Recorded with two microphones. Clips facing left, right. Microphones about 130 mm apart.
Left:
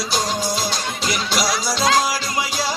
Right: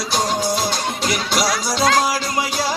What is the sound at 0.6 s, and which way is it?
Music, 55° right (ahead or behind).